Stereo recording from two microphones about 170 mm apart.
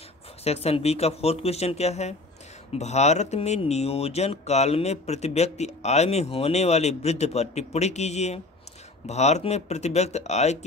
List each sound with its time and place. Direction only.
0.4 s speech: 35° left (ahead or behind)